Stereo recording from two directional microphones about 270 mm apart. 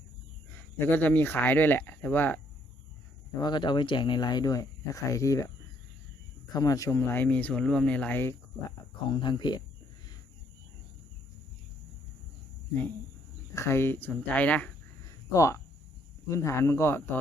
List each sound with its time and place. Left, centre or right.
0.8 s speech: centre
3.4 s speech: centre
6.5 s speech: centre
13.5 s speech: centre